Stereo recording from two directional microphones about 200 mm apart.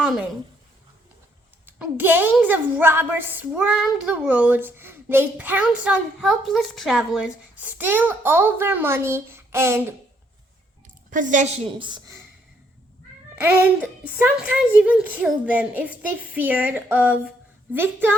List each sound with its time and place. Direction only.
1.6 s a woman's voice: 10° right (ahead or behind)
11.1 s a woman's voice: 40° right (ahead or behind); by 12.1 s 20° right (ahead or behind)
13.4 s a woman's voice: 10° right (ahead or behind)